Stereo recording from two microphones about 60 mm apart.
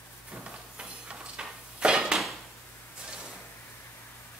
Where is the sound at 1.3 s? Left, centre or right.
Centre.